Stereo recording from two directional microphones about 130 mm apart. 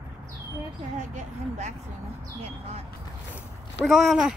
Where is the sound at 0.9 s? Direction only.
65° right (ahead or behind).